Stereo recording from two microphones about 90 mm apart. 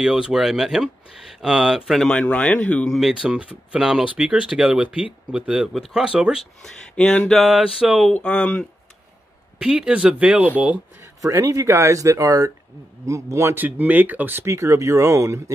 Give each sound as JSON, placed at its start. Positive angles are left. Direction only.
{"t": 0.0, "sound": "speech", "side_deg": -5}
{"t": 1.9, "sound": "speech", "side_deg": 5}
{"t": 2.9, "sound": "speech", "side_deg": 0}
{"t": 3.2, "sound": "speech", "side_deg": -15}
{"t": 6.6, "sound": "speech", "side_deg": 15}
{"t": 7.3, "sound": "speech", "side_deg": -5}
{"t": 8.1, "sound": "speech", "side_deg": 10}
{"t": 9.6, "sound": "speech", "side_deg": -10}
{"t": 11.1, "sound": "speech", "side_deg": -40}
{"t": 13.6, "sound": "speech", "side_deg": -20}
{"t": 14.5, "sound": "speech", "side_deg": -35}